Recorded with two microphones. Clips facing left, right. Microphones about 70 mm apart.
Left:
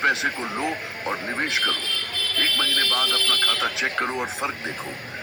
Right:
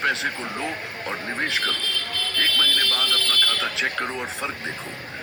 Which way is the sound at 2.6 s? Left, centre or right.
Left.